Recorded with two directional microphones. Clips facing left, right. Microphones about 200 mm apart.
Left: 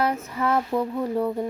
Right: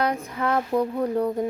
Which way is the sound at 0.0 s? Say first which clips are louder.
Even; 5° left (ahead or behind).